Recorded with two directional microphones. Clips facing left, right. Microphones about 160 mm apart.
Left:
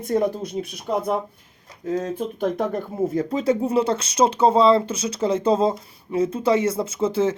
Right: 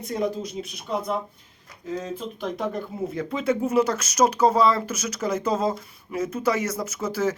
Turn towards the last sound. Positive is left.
turn(degrees=25)  # may be behind; listen again after turning